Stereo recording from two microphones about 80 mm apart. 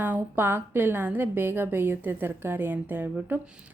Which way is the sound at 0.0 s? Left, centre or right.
Right.